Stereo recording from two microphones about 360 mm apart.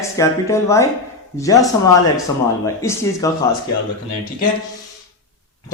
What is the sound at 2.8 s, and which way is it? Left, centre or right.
Speech, centre.